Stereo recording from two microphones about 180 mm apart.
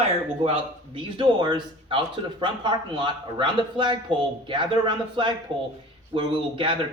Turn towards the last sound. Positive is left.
turn(degrees=-30)  # may be behind; listen again after turning